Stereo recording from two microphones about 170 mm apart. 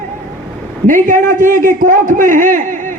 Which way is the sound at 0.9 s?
50° right (ahead or behind).